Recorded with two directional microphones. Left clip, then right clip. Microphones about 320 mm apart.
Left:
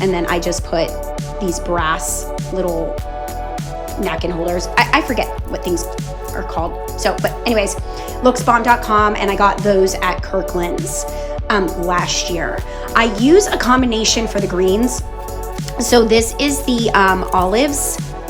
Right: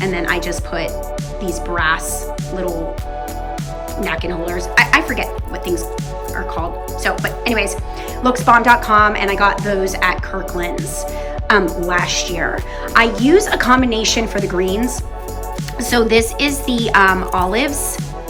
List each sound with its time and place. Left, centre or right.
0.0 s speech: centre
4.0 s speech: centre